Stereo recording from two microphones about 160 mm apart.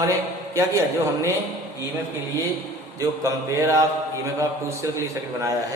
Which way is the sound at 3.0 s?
20° right (ahead or behind).